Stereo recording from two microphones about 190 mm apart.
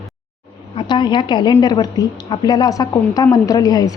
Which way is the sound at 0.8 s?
25° left (ahead or behind).